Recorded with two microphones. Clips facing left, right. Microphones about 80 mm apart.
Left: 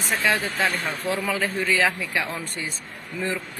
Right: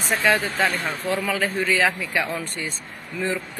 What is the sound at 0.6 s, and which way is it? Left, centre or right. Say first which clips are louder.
Speech: right 2 dB; right.